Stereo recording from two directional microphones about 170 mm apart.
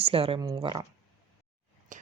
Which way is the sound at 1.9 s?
50° right (ahead or behind).